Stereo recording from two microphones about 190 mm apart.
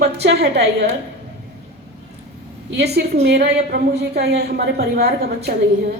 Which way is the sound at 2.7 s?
60° right (ahead or behind).